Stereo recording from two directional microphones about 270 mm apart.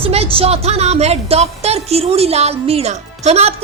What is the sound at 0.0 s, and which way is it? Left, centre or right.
A woman's voice, right.